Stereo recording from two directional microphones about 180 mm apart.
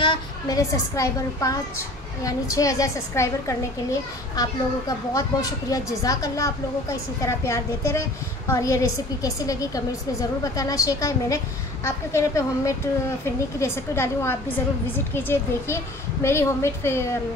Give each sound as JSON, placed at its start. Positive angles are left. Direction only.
{"t": 0.0, "sound": "a child's voice", "side_deg": 25}